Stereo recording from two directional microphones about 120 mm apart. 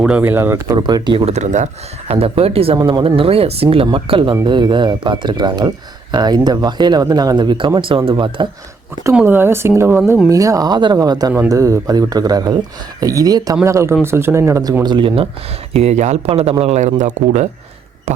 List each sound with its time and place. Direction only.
0.0 s speech: 15° right (ahead or behind)
0.7 s speech: 35° right (ahead or behind)
1.2 s speech: 75° right (ahead or behind)
2.1 s speech: 55° right (ahead or behind)
2.7 s speech: 40° right (ahead or behind)
9.2 s speech: 20° right (ahead or behind)
14.8 s speech: 45° right (ahead or behind)
15.7 s a man's voice: 65° right (ahead or behind); by 17.5 s 85° right